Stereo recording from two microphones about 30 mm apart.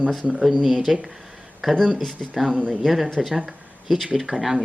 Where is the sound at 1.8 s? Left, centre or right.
Centre.